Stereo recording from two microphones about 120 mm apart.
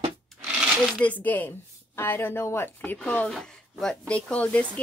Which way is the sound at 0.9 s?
10° left (ahead or behind).